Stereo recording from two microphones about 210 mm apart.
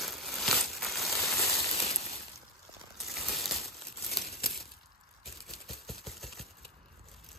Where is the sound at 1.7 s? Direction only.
30° left (ahead or behind).